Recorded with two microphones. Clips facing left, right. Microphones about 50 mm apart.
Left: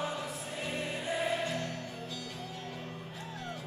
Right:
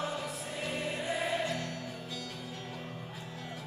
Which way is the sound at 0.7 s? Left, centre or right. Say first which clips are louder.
Even; centre.